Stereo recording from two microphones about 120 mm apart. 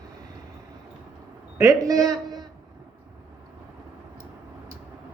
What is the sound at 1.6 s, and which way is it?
Speech, 30° right (ahead or behind).